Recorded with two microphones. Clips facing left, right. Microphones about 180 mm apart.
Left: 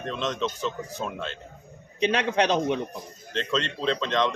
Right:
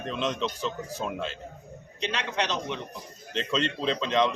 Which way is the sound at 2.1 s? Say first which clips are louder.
Left 6 dB; 55° left (ahead or behind).